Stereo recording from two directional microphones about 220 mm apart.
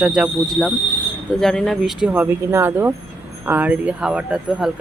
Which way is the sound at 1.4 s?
Centre (ahead or behind).